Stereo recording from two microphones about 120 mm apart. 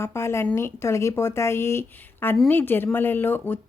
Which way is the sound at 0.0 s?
20° left (ahead or behind).